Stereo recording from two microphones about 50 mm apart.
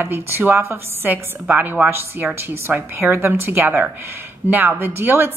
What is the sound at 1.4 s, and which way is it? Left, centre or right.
Speech, right.